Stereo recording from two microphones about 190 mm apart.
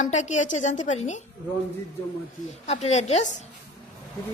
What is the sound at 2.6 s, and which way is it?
Speech, 35° left (ahead or behind).